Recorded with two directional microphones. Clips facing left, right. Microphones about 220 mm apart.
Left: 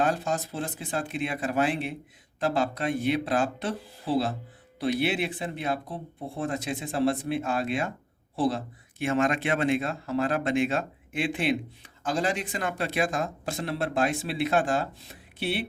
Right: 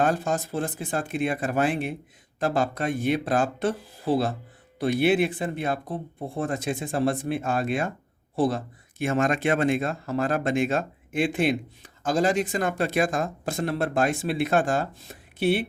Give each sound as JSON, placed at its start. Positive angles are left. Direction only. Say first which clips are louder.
{"t": 0.0, "sound": "speech", "louder": "right 2 dB", "side_deg": -50}